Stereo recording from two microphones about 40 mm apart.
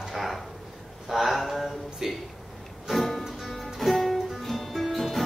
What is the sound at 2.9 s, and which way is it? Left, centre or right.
Music, centre.